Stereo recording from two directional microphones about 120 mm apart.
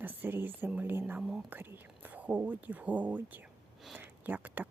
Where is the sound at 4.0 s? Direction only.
15° right (ahead or behind).